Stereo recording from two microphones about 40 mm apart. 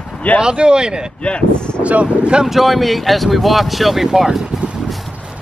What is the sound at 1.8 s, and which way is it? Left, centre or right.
Speech, right.